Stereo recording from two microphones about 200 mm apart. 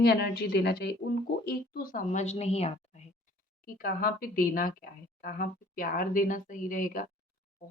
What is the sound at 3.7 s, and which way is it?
A woman's voice, 45° left (ahead or behind).